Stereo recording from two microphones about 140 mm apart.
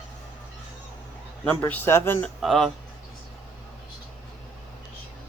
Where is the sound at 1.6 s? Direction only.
15° left (ahead or behind).